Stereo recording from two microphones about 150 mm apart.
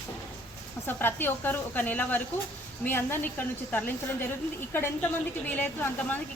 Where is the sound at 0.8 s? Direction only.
15° left (ahead or behind).